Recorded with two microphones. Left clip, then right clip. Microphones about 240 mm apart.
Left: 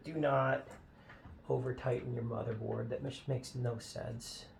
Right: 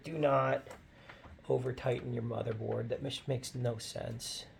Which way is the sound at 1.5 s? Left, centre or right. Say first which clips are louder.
Right 2 dB; right.